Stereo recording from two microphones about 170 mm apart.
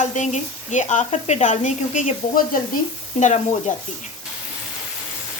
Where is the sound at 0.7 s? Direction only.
45° left (ahead or behind).